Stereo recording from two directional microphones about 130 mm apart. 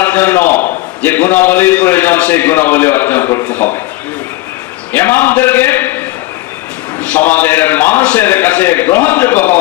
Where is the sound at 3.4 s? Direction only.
15° left (ahead or behind).